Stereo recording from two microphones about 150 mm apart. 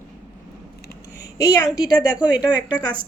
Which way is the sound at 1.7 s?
90° right.